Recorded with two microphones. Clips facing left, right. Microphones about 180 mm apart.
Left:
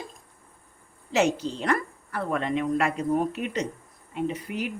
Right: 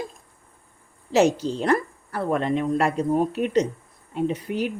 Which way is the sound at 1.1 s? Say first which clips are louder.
Right 5 dB; 40° right (ahead or behind).